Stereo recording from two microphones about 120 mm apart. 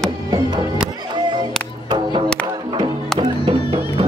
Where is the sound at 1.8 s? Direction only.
40° right (ahead or behind).